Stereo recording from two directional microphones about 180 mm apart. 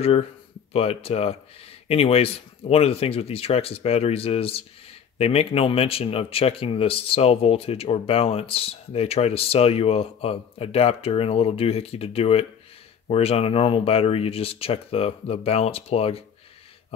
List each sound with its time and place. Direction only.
0.0 s speech: 35° left (ahead or behind)